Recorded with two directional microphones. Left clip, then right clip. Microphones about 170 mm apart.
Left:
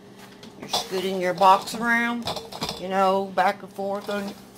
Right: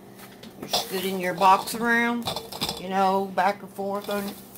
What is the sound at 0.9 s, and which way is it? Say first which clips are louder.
Speech: left 3 dB; 15° left (ahead or behind).